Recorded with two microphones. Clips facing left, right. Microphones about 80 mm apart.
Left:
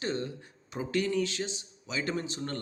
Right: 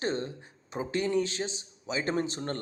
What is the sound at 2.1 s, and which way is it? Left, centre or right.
Speech, right.